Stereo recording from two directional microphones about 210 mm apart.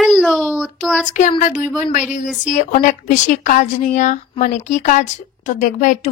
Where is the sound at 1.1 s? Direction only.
35° left (ahead or behind).